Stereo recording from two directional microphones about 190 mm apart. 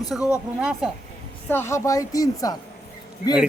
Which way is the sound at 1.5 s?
15° left (ahead or behind).